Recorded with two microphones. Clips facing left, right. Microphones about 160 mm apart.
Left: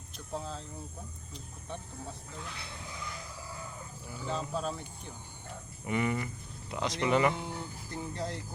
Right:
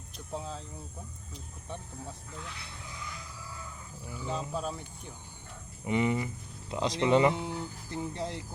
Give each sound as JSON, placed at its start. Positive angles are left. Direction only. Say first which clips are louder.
{"t": 0.3, "sound": "a sound", "louder": "even", "side_deg": -15}
{"t": 4.3, "sound": "speech", "louder": "even", "side_deg": -10}
{"t": 5.8, "sound": "speech", "louder": "right 3 dB", "side_deg": -20}